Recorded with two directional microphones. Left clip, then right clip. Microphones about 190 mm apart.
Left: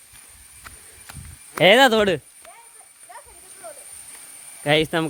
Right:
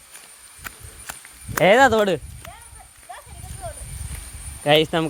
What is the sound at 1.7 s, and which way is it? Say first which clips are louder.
Speech: even; 35° left (ahead or behind).